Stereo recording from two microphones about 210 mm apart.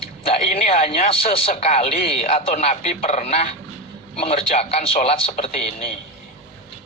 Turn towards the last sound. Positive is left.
turn(degrees=30)  # may be behind; listen again after turning